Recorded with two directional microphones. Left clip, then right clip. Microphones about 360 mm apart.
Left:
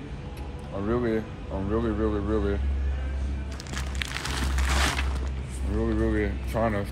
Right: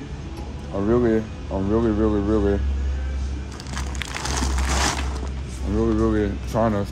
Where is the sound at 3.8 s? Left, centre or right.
Centre.